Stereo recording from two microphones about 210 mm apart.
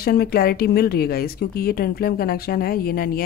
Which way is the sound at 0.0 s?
45° left (ahead or behind).